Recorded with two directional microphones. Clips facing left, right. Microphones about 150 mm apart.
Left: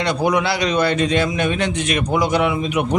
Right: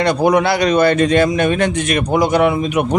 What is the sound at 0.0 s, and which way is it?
A man's voice, 50° right (ahead or behind).